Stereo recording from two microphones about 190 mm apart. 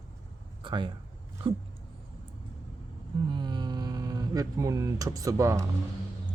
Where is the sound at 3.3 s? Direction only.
25° right (ahead or behind).